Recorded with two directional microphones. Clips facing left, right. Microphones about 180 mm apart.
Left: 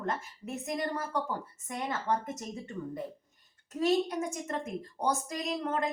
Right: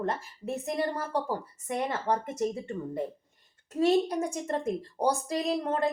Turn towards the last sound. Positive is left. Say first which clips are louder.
# right 4 dB
turn(degrees=-35)  # may be behind; listen again after turning